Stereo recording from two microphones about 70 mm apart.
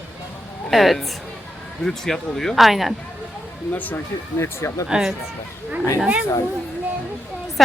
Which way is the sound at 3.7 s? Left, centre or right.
Left.